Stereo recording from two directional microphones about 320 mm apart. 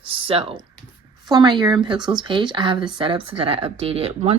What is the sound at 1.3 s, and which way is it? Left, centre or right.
Speech, centre.